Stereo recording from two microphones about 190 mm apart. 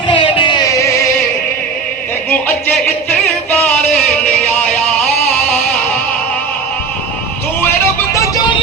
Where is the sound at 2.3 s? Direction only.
10° left (ahead or behind).